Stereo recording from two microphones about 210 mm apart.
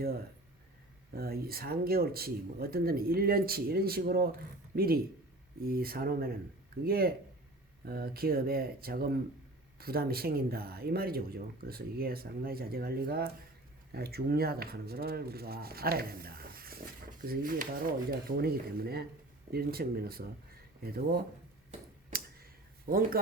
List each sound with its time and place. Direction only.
1.1 s speech: 45° right (ahead or behind)
22.1 s a sound: 45° right (ahead or behind)
22.9 s speech: 45° right (ahead or behind)